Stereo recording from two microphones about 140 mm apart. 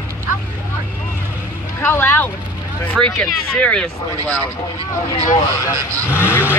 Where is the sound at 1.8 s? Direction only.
15° left (ahead or behind).